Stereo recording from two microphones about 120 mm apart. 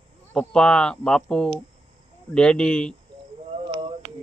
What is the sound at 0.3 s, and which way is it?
Speech, 5° left (ahead or behind).